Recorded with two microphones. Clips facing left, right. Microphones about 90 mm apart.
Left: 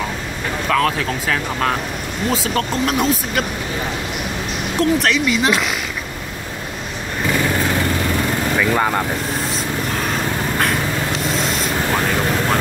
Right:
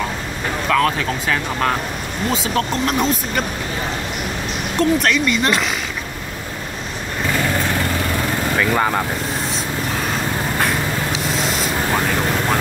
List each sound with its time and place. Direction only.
0.7 s speech: centre (ahead or behind)
4.7 s speech: centre (ahead or behind)
8.5 s speech: centre (ahead or behind)
11.2 s vehicle: centre (ahead or behind)